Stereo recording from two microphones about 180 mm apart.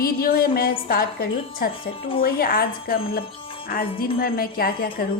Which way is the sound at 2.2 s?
55° left (ahead or behind).